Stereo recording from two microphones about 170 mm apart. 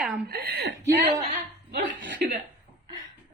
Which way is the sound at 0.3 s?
70° right (ahead or behind).